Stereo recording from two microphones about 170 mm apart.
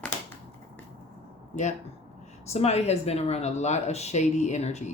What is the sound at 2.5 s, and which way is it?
Speech, 40° left (ahead or behind).